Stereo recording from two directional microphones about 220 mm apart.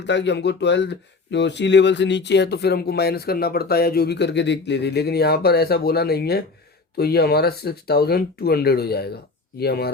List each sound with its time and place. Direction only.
0.0 s speech: 50° left (ahead or behind)